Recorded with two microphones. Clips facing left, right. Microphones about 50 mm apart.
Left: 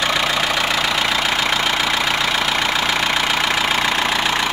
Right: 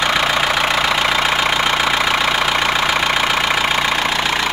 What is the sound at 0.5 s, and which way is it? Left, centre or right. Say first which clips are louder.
Vehicle: right 3 dB; centre.